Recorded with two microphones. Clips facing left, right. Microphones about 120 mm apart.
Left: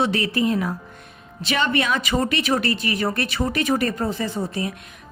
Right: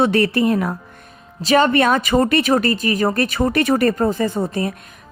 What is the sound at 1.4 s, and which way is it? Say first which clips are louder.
A woman's voice: right 8 dB; 40° right (ahead or behind).